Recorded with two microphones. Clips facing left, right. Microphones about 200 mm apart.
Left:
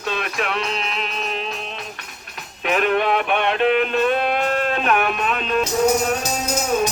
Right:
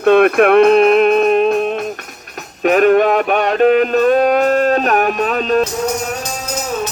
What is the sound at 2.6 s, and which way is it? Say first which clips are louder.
Mantra: right 9 dB; 45° right (ahead or behind).